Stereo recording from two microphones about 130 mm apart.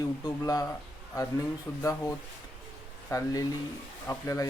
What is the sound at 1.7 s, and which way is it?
Speech, 20° left (ahead or behind).